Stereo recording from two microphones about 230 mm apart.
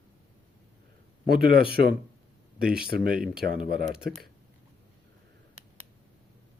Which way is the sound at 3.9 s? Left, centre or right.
Centre.